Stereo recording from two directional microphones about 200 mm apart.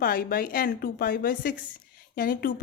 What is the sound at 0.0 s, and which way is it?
A woman's voice, 45° left (ahead or behind).